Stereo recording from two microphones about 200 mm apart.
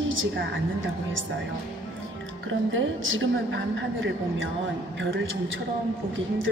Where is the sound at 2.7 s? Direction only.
80° right.